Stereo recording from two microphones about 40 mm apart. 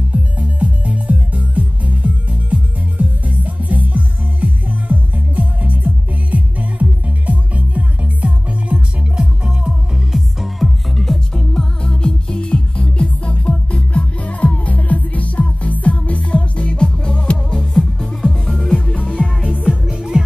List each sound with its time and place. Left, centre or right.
0.1 s music: right
9.1 s music: right
10.1 s music: centre
11.0 s music: centre
17.7 s music: centre
19.9 s music: centre